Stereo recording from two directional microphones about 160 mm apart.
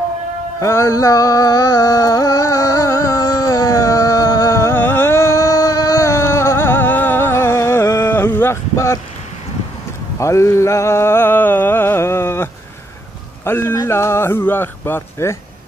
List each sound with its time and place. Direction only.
0.6 s music: 20° left (ahead or behind)
10.1 s music: 20° left (ahead or behind)
13.4 s a sound: 15° left (ahead or behind)